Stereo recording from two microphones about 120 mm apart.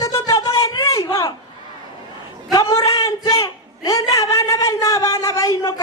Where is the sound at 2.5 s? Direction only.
30° left (ahead or behind).